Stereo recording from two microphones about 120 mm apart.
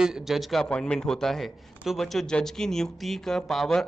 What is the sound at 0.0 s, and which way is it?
A man's voice, 5° right (ahead or behind).